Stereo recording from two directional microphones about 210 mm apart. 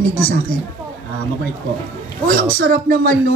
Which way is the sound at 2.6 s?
40° right (ahead or behind).